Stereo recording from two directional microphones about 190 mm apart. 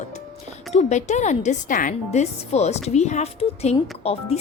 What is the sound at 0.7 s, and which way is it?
A woman's voice, 35° left (ahead or behind).